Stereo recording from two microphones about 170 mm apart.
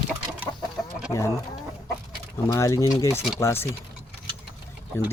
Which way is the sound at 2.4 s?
20° left (ahead or behind).